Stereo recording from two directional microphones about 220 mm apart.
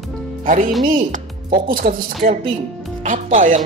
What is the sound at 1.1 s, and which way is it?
Speech, 40° right (ahead or behind).